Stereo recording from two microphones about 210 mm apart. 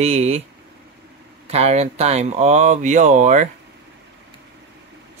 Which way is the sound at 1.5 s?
30° right (ahead or behind).